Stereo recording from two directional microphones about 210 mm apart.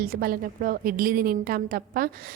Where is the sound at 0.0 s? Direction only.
45° right (ahead or behind).